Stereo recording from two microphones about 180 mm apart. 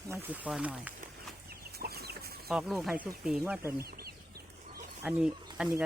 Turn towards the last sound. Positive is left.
turn(degrees=-5)  # may be behind; listen again after turning